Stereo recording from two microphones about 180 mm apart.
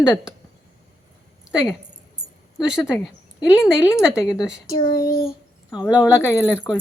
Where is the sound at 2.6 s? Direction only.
5° right (ahead or behind).